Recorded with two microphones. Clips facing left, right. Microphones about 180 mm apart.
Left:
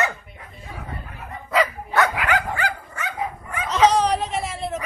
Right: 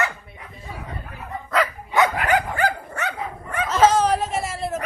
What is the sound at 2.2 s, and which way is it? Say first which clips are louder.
Dog: right 2 dB; 45° right (ahead or behind).